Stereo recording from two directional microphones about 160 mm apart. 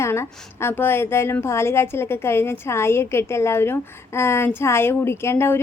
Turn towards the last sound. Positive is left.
turn(degrees=15)  # may be behind; listen again after turning